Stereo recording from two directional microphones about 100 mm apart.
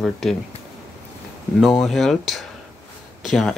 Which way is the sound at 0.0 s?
Centre (ahead or behind).